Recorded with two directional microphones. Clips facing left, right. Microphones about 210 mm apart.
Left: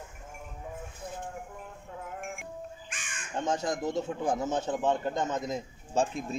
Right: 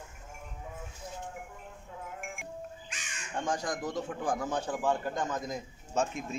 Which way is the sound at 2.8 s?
50° left (ahead or behind).